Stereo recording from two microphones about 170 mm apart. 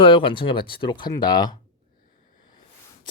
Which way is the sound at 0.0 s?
30° left (ahead or behind).